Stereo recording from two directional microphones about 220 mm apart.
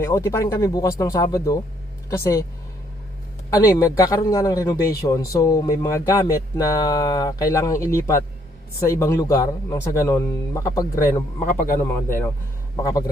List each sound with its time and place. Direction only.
0.0 s speech: 15° left (ahead or behind)
3.5 s speech: 15° left (ahead or behind)
11.4 s a man's voice: 35° left (ahead or behind)
12.7 s speech: 15° left (ahead or behind)